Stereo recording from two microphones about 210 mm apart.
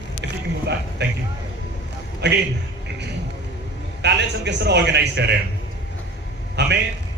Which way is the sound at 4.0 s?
55° right (ahead or behind).